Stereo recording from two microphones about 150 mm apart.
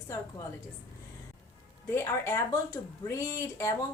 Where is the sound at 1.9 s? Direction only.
15° left (ahead or behind).